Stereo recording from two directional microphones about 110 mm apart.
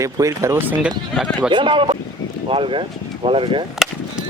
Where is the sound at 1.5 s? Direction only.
45° right (ahead or behind).